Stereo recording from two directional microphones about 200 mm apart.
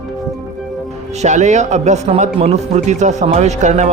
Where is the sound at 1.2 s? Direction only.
35° right (ahead or behind).